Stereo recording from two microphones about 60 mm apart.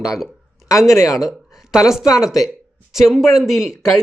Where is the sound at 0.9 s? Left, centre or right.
Left.